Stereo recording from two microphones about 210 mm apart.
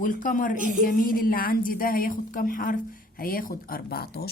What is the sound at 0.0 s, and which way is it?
A woman's voice, 40° left (ahead or behind).